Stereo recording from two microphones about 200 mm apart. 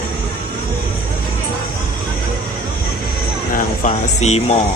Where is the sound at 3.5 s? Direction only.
35° left (ahead or behind).